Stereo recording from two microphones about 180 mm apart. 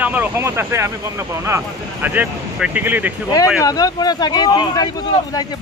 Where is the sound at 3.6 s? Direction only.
20° left (ahead or behind).